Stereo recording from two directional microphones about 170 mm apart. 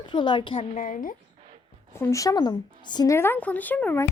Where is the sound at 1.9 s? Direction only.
15° left (ahead or behind).